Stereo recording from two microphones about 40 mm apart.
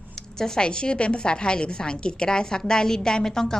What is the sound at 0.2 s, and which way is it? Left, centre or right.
A woman's voice, centre.